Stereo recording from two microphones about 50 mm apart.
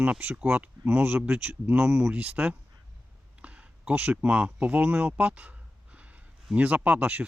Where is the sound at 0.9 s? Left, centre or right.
Right.